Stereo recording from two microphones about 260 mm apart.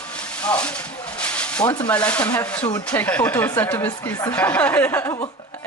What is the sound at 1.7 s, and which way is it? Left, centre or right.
Speech, centre.